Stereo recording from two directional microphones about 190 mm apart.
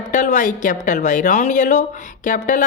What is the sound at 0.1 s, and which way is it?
Speech, 40° left (ahead or behind).